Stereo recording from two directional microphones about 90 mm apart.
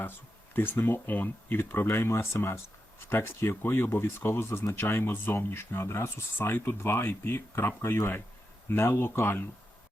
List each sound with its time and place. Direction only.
0.0 s speech: 20° left (ahead or behind)